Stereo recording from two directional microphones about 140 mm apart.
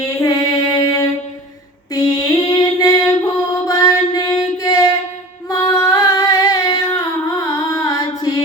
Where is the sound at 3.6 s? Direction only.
25° left (ahead or behind).